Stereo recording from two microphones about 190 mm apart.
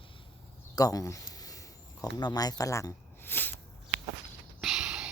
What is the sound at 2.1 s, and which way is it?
Speech, 20° left (ahead or behind).